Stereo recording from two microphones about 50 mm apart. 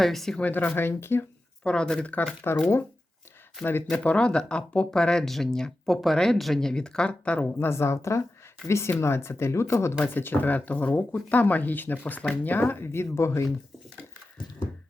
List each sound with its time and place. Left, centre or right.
0.0 s speech: centre
0.3 s speech: left
0.8 s speech: left
1.6 s speech: centre
2.4 s speech: left
3.6 s speech: left
3.9 s speech: left
7.3 s speech: left
7.6 s speech: left
10.0 s speech: left
10.3 s speech: left
12.8 s speech: left